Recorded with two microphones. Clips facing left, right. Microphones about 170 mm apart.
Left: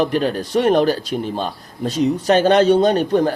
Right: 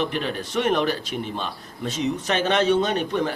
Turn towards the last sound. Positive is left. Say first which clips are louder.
# left 8 dB
turn(degrees=35)  # may be behind; listen again after turning